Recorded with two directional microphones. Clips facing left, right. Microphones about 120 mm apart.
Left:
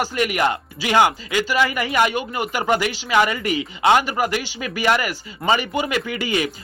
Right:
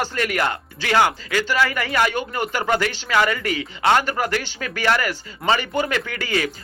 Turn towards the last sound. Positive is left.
turn(degrees=15)  # may be behind; listen again after turning